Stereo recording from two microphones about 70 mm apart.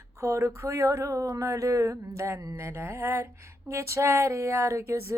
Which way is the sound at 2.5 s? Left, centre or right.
Right.